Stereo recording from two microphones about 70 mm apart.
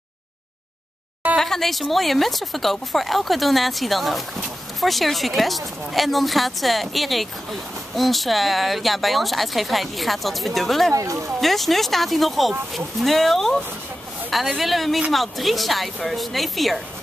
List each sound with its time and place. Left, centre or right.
1.4 s speech: centre
10.9 s speech: right
11.4 s speech: centre
14.6 s speech: centre